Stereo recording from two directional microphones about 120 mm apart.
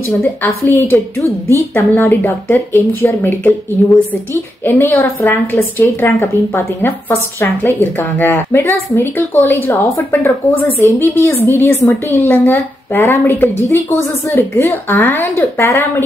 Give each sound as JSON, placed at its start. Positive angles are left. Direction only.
{"t": 0.2, "sound": "a woman's voice", "side_deg": 15}
{"t": 10.8, "sound": "a woman's voice", "side_deg": 15}